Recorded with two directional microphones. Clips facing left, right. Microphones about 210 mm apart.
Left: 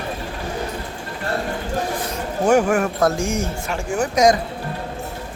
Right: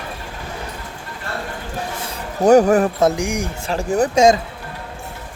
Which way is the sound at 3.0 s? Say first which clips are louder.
Right 2 dB; 15° right (ahead or behind).